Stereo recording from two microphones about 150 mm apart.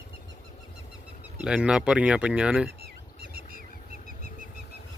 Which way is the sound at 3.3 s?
75° right (ahead or behind).